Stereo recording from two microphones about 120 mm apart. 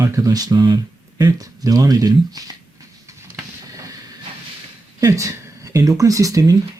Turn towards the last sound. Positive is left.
turn(degrees=-30)  # may be behind; listen again after turning